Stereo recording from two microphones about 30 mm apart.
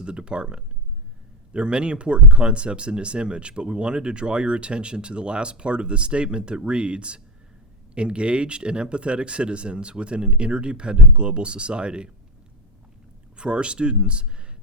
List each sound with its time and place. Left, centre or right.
0.0 s speech: right
13.3 s speech: right